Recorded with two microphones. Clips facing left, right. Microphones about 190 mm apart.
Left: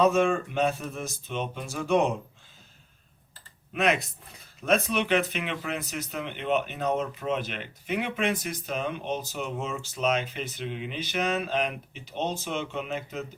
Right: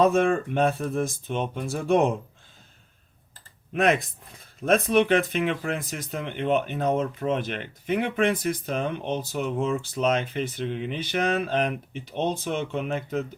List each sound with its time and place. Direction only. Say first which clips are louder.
0.0 s speech: right 2 dB; 55° right (ahead or behind)
3.8 s speech: right 3 dB; 50° right (ahead or behind)